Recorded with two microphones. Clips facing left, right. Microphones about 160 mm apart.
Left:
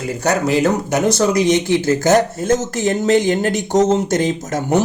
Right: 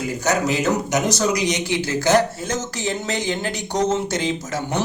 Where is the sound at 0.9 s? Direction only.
55° left (ahead or behind).